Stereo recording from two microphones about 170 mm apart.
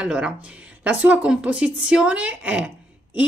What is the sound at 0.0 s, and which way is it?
A woman's voice, 5° right (ahead or behind).